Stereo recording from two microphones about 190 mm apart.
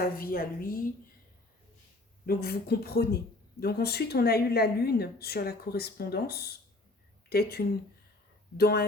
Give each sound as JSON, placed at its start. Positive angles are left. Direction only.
{"t": 0.0, "sound": "a woman's voice", "side_deg": 50}
{"t": 2.2, "sound": "a woman's voice", "side_deg": 55}